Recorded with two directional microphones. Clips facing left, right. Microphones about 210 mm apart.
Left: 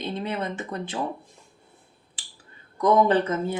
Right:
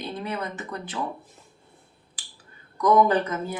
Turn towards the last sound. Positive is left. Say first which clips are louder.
# left 2 dB
turn(degrees=25)  # may be behind; listen again after turning